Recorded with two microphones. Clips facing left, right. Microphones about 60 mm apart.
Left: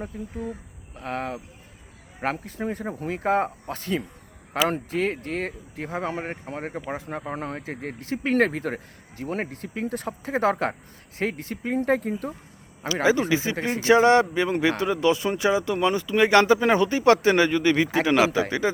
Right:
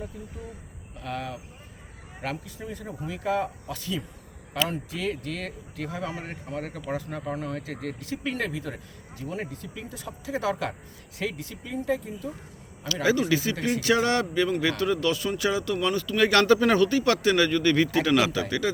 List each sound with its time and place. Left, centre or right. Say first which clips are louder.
0.1 s speech: left 7 dB; left
12.8 s speech: left 3 dB; left